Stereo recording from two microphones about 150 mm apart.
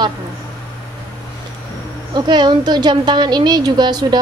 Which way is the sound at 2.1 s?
30° right (ahead or behind).